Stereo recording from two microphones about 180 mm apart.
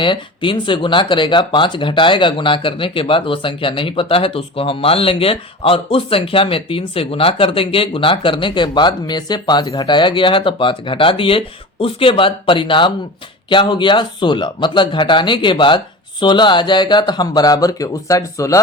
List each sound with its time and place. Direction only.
0.0 s speech: 25° left (ahead or behind)